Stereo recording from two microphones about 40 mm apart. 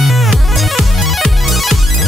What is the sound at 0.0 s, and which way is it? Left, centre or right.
Music, centre.